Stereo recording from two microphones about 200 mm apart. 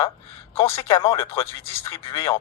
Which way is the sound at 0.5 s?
25° left (ahead or behind).